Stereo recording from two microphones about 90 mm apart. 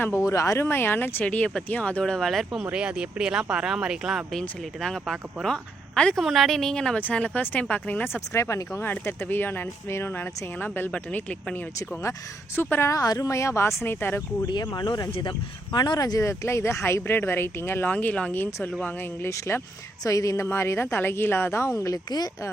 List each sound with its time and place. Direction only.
0.0 s speech: 30° left (ahead or behind)
0.7 s speech: 25° left (ahead or behind); by 4.2 s 5° right (ahead or behind)
4.3 s speech: 5° left (ahead or behind)
12.5 s speech: 25° left (ahead or behind)
13.0 s speech: 40° left (ahead or behind); by 14.2 s 25° left (ahead or behind)
14.5 s speech: 55° left (ahead or behind)
16.2 s speech: 30° left (ahead or behind)